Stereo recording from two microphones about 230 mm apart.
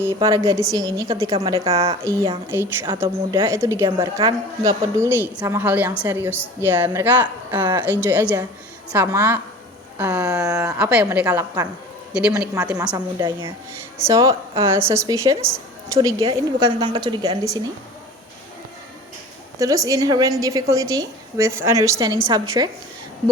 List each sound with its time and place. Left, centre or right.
0.0 s a woman's voice: centre
19.5 s a woman's voice: centre